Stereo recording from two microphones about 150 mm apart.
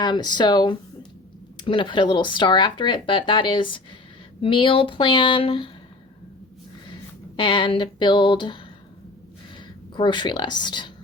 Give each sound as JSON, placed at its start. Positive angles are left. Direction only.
{"t": 0.0, "sound": "speech", "side_deg": 30}
{"t": 7.3, "sound": "speech", "side_deg": 30}
{"t": 9.9, "sound": "speech", "side_deg": 30}